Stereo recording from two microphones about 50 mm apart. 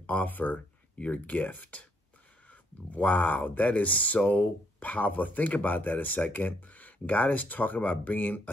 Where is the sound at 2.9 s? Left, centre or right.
Left.